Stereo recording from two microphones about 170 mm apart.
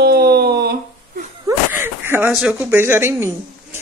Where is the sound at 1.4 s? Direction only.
15° right (ahead or behind).